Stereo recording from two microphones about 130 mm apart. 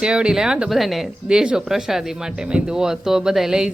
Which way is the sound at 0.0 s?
5° right (ahead or behind).